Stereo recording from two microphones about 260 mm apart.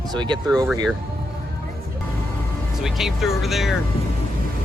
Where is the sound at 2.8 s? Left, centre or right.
Centre.